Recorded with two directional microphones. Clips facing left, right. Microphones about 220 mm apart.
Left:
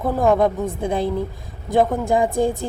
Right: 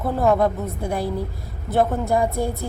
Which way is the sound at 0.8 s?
20° left (ahead or behind).